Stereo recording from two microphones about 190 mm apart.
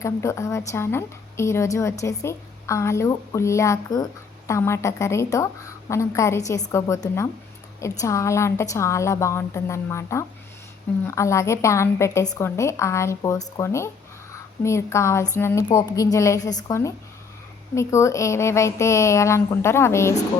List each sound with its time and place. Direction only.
0.0 s a woman's voice: 15° left (ahead or behind)